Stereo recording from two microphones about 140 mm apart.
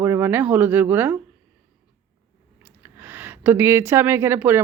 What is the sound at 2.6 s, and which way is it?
Speech, 15° right (ahead or behind).